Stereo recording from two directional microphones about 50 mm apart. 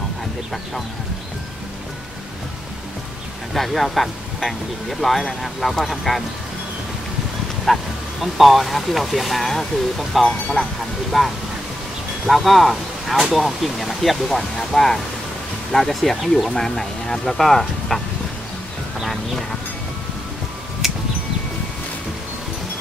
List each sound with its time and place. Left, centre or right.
3.5 s speech: centre
7.6 s speech: centre
10.6 s speech: left
11.1 s speech: centre
20.8 s a sound: centre